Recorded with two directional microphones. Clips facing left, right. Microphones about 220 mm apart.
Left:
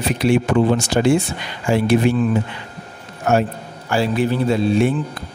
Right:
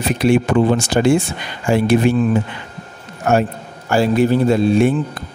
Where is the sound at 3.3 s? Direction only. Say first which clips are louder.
Right 1 dB; 50° right (ahead or behind).